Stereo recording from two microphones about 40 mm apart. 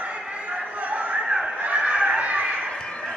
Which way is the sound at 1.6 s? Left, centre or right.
Right.